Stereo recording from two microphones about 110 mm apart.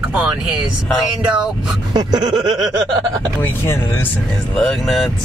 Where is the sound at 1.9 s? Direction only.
40° right (ahead or behind).